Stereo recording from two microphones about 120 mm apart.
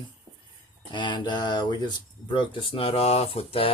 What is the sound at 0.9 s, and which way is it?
Speech, 40° left (ahead or behind).